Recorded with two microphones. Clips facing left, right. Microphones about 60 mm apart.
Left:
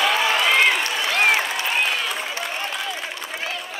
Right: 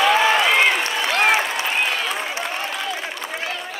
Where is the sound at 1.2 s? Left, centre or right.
Right.